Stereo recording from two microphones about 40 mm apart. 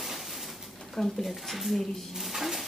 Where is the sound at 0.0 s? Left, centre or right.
Centre.